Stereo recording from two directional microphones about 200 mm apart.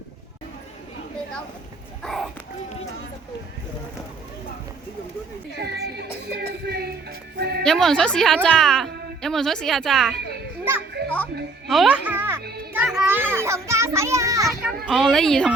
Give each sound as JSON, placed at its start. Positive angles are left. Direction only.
{"t": 2.0, "sound": "a child's voice", "side_deg": 0}
{"t": 5.5, "sound": "a child's voice", "side_deg": -55}
{"t": 7.6, "sound": "speech", "side_deg": 0}
{"t": 11.0, "sound": "music", "side_deg": -55}
{"t": 11.7, "sound": "a child's voice", "side_deg": -5}
{"t": 12.7, "sound": "children playing", "side_deg": -5}
{"t": 14.8, "sound": "speech", "side_deg": 0}